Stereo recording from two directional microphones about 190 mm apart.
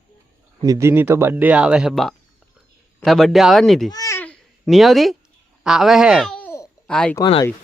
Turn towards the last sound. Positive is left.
turn(degrees=25)  # may be behind; listen again after turning